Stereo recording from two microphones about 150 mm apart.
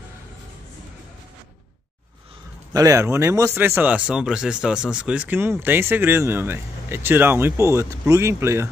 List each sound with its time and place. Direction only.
2.7 s speech: 20° right (ahead or behind)